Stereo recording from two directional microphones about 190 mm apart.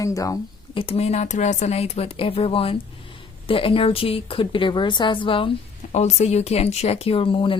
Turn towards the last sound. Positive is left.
turn(degrees=25)  # may be behind; listen again after turning